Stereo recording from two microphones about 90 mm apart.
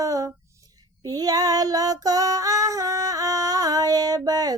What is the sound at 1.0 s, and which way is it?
Female singing, 45° right (ahead or behind).